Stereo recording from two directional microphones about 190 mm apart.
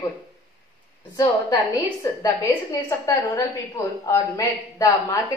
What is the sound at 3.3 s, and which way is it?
A woman's voice, 15° left (ahead or behind).